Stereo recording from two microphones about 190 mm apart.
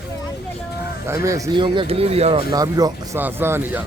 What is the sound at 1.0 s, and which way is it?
Speech, 15° right (ahead or behind).